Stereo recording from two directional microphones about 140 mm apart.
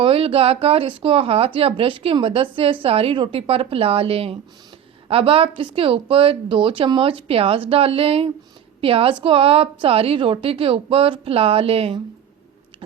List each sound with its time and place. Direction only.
0.0 s a woman's voice: 40° right (ahead or behind)